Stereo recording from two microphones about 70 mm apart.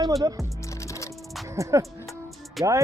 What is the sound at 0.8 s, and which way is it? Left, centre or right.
Music, left.